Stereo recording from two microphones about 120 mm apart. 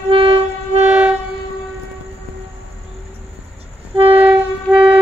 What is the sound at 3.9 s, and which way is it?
Train, 50° right (ahead or behind).